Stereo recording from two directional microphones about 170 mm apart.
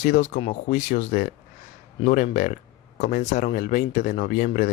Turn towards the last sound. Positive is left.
turn(degrees=50)  # may be behind; listen again after turning